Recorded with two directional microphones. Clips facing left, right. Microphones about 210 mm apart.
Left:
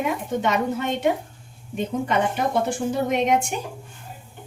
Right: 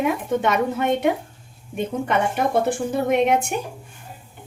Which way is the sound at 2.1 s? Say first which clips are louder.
Right 3 dB; 55° right (ahead or behind).